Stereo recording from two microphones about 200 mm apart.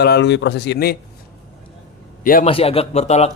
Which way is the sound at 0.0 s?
55° left (ahead or behind).